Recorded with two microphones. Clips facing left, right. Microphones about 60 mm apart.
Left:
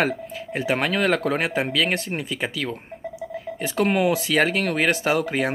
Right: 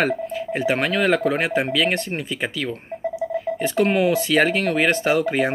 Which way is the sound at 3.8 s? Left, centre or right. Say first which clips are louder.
Right 1 dB; centre.